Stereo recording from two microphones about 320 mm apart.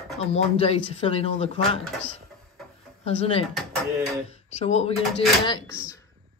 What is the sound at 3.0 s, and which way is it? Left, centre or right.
A woman's voice, centre.